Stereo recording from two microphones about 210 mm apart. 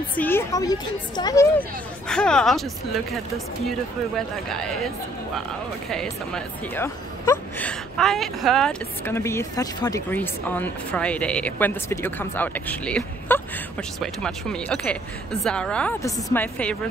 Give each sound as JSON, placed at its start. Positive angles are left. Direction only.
{"t": 0.2, "sound": "speech", "side_deg": 10}
{"t": 4.5, "sound": "a woman's voice", "side_deg": 0}